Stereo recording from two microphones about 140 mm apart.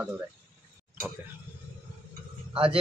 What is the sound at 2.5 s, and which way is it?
Speech, 40° right (ahead or behind).